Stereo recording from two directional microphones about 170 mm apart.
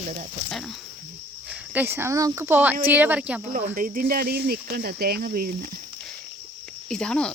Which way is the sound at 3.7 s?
55° right (ahead or behind).